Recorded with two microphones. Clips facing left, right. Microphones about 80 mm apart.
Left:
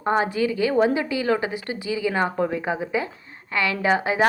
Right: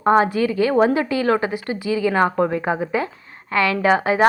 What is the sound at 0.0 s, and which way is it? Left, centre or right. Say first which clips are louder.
Speech: right 5 dB; right.